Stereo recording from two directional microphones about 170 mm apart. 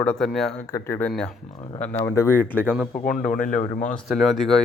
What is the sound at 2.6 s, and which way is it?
Speech, 10° right (ahead or behind).